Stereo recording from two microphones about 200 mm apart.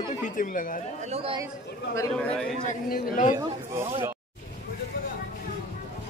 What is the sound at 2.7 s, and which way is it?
Speech, 45° left (ahead or behind).